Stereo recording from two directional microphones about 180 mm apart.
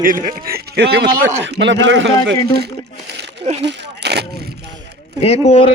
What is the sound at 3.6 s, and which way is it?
Speech, 75° right (ahead or behind).